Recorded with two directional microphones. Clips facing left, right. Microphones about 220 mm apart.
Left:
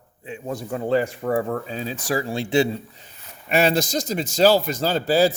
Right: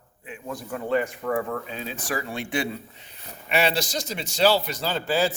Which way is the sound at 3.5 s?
45° left (ahead or behind).